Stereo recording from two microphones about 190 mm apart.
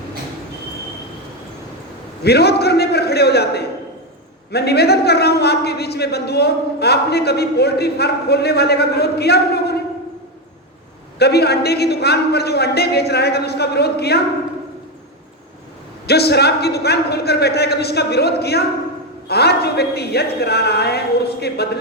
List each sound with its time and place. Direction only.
2.2 s a man's voice: 60° left (ahead or behind)
11.2 s a man's voice: 60° left (ahead or behind)
16.0 s a man's voice: 60° left (ahead or behind)